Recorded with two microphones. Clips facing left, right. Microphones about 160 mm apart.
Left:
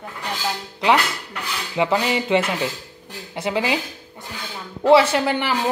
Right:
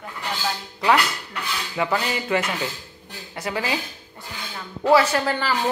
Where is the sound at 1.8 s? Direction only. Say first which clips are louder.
Left 4 dB; 25° left (ahead or behind).